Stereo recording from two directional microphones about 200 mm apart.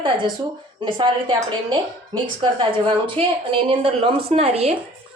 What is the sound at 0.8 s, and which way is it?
A woman's voice, 20° right (ahead or behind).